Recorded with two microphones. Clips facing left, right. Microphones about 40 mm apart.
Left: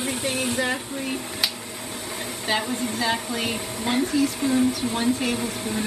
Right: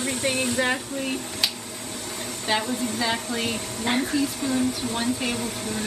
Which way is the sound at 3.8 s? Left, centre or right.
Centre.